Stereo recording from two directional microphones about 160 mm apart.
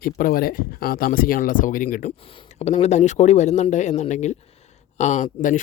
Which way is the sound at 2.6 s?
40° left (ahead or behind).